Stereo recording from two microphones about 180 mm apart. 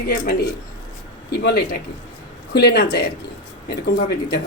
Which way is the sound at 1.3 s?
65° left (ahead or behind).